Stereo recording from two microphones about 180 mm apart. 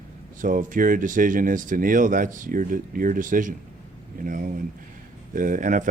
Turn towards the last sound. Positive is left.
turn(degrees=-45)  # may be behind; listen again after turning